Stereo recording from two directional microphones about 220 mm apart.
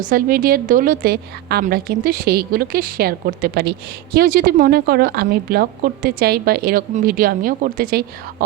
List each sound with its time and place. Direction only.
0.0 s a woman's voice: 40° right (ahead or behind)